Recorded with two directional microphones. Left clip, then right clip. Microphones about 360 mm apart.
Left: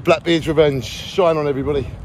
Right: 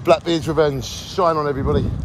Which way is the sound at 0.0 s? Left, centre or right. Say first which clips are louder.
Even; centre.